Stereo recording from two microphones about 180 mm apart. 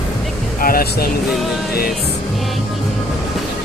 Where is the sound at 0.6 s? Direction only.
55° left (ahead or behind).